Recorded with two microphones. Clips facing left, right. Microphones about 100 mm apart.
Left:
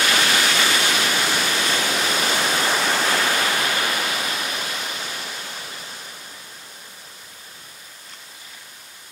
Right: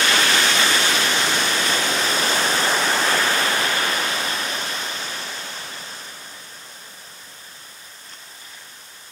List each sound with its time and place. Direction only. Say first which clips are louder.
0.0 s waterfall: right 1 dB; 35° right (ahead or behind)